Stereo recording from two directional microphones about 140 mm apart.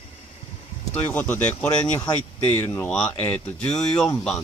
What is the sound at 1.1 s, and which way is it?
Speech, 15° left (ahead or behind).